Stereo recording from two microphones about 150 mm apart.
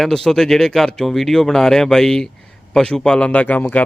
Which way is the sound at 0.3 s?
5° left (ahead or behind).